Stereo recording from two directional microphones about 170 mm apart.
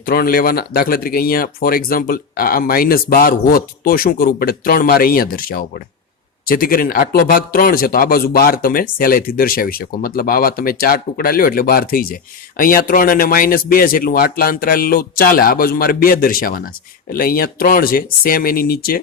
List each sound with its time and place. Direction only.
0.0 s speech: 60° left (ahead or behind)